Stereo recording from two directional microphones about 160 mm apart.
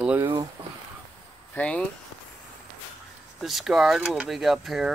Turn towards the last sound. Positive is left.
turn(degrees=0)  # may be behind; listen again after turning